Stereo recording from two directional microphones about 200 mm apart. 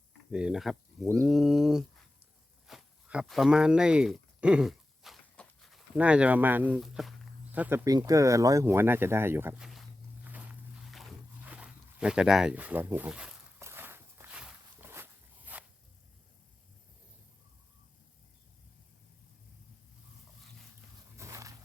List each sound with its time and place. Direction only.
0.3 s speech: 5° right (ahead or behind)
1.3 s a sound: centre (ahead or behind)
7.5 s speech: 10° right (ahead or behind)
10.2 s walk: 5° right (ahead or behind)
21.2 s roaring cats: 15° right (ahead or behind)